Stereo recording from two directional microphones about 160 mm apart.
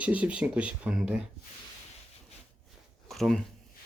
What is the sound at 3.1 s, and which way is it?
Speech, centre (ahead or behind).